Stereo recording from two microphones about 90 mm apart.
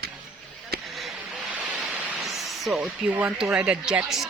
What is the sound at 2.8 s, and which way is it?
Speech, 20° right (ahead or behind).